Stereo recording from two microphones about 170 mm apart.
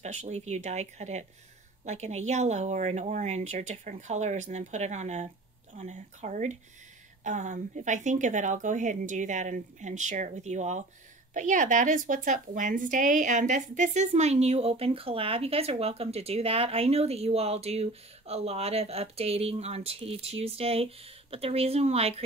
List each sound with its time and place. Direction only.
0.0 s a woman's voice: 40° right (ahead or behind)